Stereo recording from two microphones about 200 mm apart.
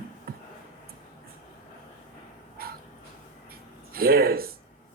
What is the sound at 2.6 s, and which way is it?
Dog, 50° right (ahead or behind).